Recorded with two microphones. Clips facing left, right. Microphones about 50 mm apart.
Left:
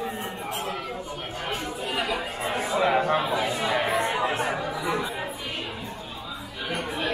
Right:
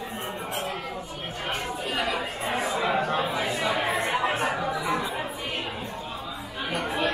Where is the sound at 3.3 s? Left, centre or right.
Centre.